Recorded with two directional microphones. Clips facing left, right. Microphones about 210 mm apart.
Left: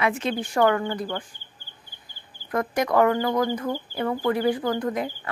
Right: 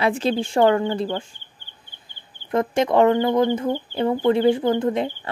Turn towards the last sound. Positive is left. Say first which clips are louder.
# right 5 dB
turn(degrees=-25)  # may be behind; listen again after turning